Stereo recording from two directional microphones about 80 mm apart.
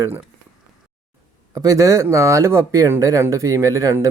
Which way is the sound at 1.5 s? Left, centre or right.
Right.